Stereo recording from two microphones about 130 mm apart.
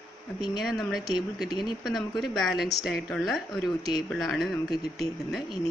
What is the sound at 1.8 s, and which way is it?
Speech, centre (ahead or behind).